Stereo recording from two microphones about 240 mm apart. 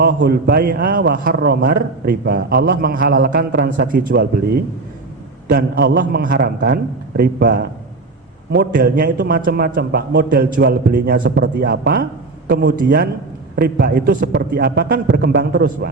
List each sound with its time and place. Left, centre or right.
0.0 s a man's voice: right